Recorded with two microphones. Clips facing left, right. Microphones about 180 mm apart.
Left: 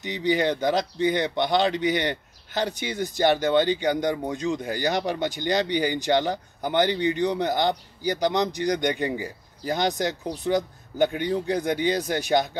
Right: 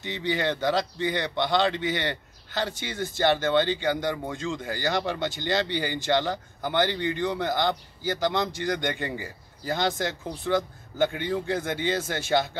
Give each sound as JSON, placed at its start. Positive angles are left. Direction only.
{"t": 0.0, "sound": "speech", "side_deg": 15}